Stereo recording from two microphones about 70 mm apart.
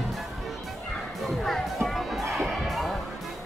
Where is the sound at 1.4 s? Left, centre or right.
Centre.